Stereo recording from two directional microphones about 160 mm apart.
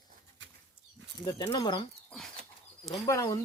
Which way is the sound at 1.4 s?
25° left (ahead or behind).